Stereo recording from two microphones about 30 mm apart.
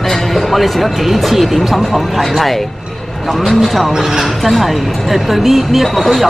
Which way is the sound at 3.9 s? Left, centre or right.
Centre.